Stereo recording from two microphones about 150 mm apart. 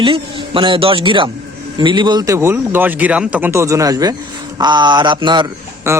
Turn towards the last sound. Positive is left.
turn(degrees=-20)  # may be behind; listen again after turning